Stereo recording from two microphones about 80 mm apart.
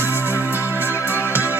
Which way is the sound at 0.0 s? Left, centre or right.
Right.